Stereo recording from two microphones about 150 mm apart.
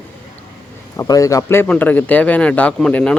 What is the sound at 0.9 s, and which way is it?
Speech, 20° left (ahead or behind).